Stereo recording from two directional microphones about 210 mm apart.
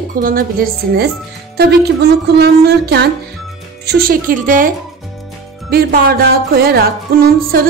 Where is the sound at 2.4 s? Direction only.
50° right (ahead or behind).